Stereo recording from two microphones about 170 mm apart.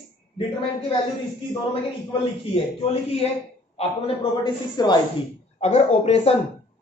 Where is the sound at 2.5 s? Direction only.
35° left (ahead or behind).